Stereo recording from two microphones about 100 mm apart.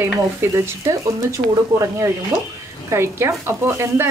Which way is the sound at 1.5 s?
30° right (ahead or behind).